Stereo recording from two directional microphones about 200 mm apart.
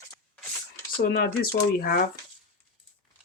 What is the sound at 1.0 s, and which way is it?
Speech, 50° left (ahead or behind).